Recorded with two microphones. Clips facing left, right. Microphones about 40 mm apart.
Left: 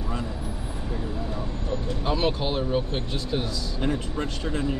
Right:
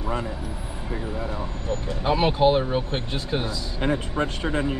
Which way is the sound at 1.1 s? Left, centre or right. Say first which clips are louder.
Right 2 dB; right.